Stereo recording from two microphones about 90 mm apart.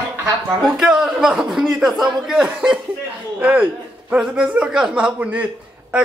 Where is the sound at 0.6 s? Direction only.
5° right (ahead or behind).